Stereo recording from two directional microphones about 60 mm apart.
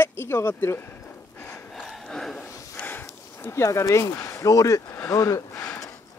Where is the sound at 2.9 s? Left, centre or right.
Left.